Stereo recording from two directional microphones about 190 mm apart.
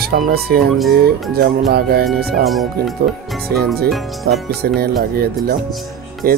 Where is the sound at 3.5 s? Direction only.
55° right (ahead or behind).